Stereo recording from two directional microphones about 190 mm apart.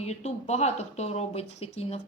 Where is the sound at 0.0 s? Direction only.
35° left (ahead or behind).